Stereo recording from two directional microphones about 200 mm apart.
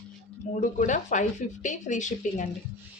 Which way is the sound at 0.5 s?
40° left (ahead or behind).